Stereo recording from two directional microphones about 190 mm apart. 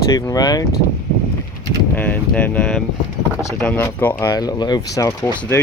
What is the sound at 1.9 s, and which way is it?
Speech, 10° left (ahead or behind).